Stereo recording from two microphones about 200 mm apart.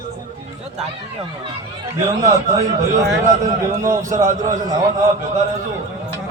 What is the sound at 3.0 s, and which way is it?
Speech, 15° right (ahead or behind).